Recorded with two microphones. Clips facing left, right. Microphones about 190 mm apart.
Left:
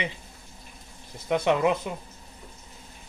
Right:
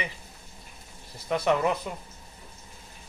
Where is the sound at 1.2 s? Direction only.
20° left (ahead or behind).